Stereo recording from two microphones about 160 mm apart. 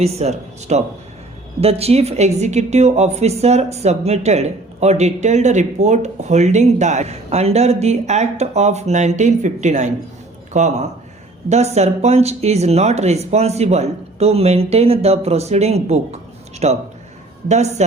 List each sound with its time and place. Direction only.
0.0 s a woman's voice: 40° right (ahead or behind)